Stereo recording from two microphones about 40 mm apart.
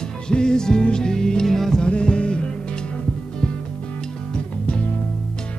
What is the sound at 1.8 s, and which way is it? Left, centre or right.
Music, left.